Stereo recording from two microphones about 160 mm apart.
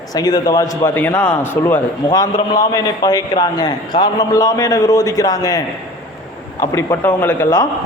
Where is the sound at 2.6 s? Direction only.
25° left (ahead or behind).